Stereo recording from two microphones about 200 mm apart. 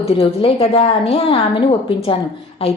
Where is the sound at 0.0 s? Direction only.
30° left (ahead or behind).